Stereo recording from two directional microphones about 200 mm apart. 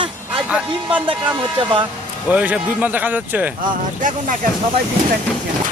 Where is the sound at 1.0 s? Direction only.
25° right (ahead or behind).